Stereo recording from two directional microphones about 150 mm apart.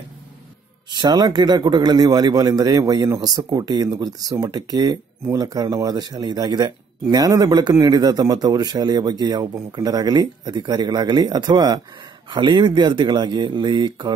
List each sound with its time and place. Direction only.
0.8 s a man's voice: 25° right (ahead or behind)